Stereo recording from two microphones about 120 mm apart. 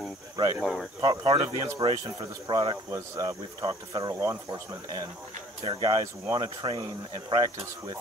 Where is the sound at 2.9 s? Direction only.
25° right (ahead or behind).